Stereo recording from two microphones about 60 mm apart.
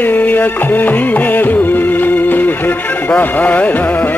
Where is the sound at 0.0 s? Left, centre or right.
Left.